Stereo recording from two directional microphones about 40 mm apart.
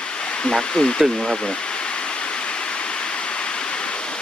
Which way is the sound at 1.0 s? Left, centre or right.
Centre.